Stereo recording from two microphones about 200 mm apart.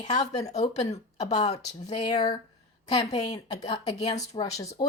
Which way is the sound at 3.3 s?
20° left (ahead or behind).